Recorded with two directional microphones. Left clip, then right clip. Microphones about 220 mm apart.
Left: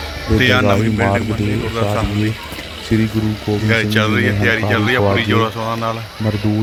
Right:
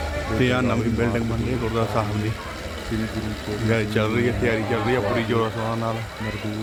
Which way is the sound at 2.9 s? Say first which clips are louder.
Left 12 dB; 40° left (ahead or behind).